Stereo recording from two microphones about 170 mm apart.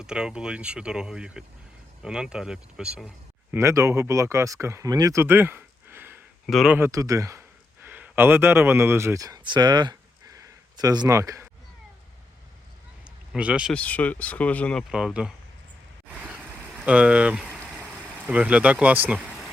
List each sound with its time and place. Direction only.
0.0 s speech: 5° right (ahead or behind)
3.5 s speech: 15° right (ahead or behind)
6.4 s speech: centre (ahead or behind)
6.7 s speech: 15° right (ahead or behind)
13.3 s speech: 5° right (ahead or behind)
13.7 s speech: 10° left (ahead or behind)
16.0 s vehicle: 10° right (ahead or behind)
16.5 s boiling: 10° right (ahead or behind)